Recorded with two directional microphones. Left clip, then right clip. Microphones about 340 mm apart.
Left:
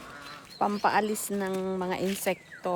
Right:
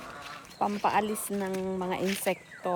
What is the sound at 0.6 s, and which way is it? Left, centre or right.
Speech, centre.